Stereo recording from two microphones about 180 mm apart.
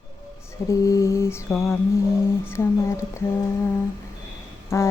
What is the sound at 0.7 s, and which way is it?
Mantra, 15° left (ahead or behind).